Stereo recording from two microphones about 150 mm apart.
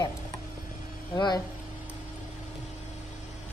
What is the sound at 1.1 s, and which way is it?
Speech, 30° left (ahead or behind).